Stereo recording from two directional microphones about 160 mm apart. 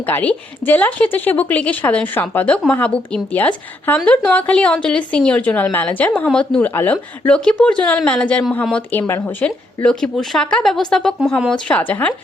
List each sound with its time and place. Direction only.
0.0 s a woman's voice: 10° left (ahead or behind)